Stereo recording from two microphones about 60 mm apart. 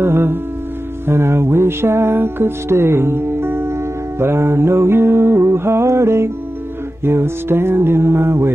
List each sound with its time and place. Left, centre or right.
0.0 s music: right